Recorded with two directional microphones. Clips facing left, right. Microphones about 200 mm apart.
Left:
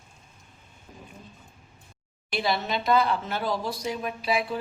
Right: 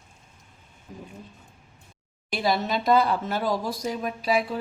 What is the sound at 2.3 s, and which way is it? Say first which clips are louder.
Speech: right 2 dB; 40° right (ahead or behind).